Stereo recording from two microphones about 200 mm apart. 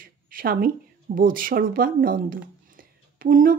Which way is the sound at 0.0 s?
45° right (ahead or behind).